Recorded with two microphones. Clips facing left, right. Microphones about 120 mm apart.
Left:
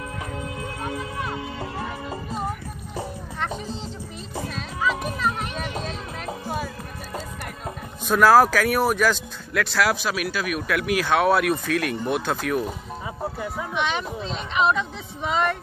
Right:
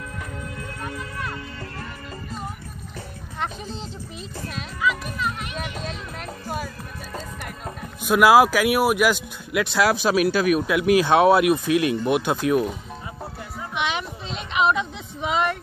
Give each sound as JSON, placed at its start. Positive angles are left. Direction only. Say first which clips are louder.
{"t": 0.9, "sound": "music", "louder": "left 3 dB", "side_deg": 15}
{"t": 6.2, "sound": "music", "louder": "left 2 dB", "side_deg": 0}
{"t": 8.0, "sound": "speech", "louder": "right 1 dB", "side_deg": -10}
{"t": 14.5, "sound": "music", "louder": "right 1 dB", "side_deg": -10}